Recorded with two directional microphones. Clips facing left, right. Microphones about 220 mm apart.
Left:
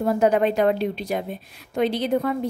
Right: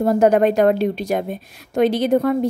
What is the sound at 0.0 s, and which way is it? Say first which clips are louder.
A woman's voice: right 5 dB; 45° right (ahead or behind).